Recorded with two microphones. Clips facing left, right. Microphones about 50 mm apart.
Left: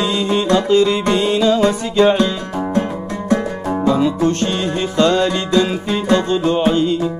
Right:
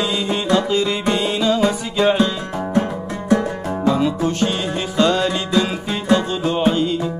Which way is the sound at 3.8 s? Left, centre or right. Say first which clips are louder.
Left 3 dB; centre.